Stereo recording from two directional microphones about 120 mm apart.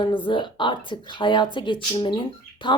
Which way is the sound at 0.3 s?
40° left (ahead or behind).